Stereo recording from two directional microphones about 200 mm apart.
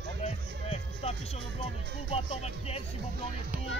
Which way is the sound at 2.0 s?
30° left (ahead or behind).